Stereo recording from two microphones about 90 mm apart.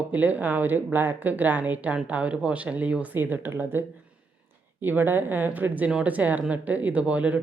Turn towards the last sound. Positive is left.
turn(degrees=-15)  # may be behind; listen again after turning